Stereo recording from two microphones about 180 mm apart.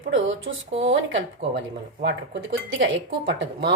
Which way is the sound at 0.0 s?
90° right.